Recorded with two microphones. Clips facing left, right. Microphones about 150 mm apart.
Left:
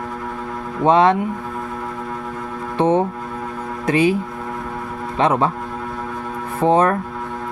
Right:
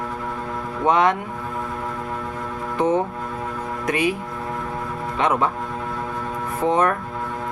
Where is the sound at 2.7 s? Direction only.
25° left (ahead or behind).